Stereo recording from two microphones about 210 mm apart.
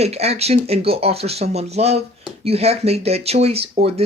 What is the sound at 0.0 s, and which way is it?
Speech, 30° right (ahead or behind).